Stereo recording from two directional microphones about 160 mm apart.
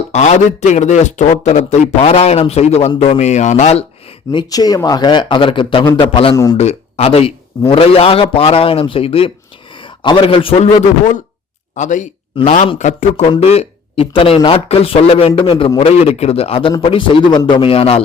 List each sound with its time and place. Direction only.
0.1 s speech: 45° left (ahead or behind)
3.2 s speech: 45° left (ahead or behind)
4.3 s speech: 25° left (ahead or behind)
6.3 s speech: 20° left (ahead or behind)
6.6 s speech: 40° left (ahead or behind)
12.4 s speech: 40° left (ahead or behind)
13.2 s speech: 35° left (ahead or behind)